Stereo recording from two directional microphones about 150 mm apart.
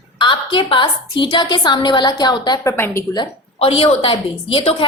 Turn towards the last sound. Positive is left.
turn(degrees=35)  # may be behind; listen again after turning